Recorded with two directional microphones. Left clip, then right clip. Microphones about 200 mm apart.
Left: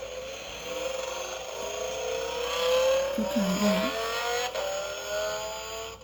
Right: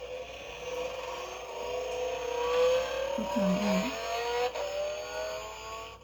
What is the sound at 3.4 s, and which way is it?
Vehicle, 25° left (ahead or behind).